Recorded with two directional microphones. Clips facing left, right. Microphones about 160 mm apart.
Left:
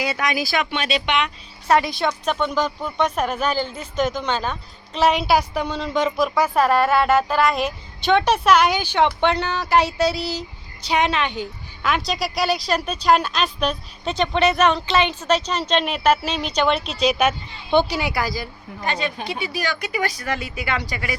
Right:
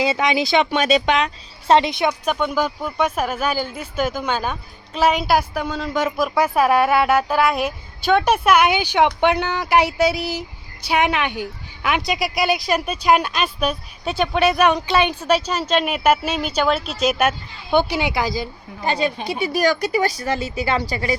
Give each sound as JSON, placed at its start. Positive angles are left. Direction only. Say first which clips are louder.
{"t": 0.0, "sound": "speech", "louder": "right 4 dB", "side_deg": -25}
{"t": 0.7, "sound": "a woman's voice", "louder": "right 5 dB", "side_deg": -45}
{"t": 17.9, "sound": "speech", "louder": "right 2 dB", "side_deg": -20}
{"t": 18.9, "sound": "a woman's voice", "louder": "right 4 dB", "side_deg": -35}